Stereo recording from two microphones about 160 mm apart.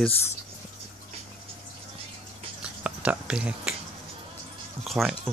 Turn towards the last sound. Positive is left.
turn(degrees=0)  # may be behind; listen again after turning